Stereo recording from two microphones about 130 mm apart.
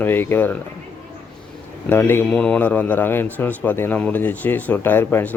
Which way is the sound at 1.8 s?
15° left (ahead or behind).